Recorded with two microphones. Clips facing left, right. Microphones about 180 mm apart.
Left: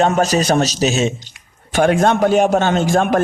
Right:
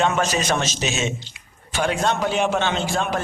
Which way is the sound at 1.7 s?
50° left (ahead or behind).